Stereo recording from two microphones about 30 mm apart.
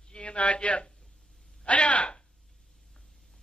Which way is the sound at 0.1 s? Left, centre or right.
Left.